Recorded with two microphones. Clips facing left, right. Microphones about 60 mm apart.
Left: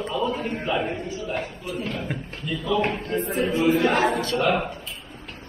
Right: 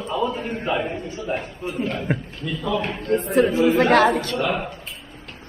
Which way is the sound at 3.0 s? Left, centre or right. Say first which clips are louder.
Right 6 dB; right.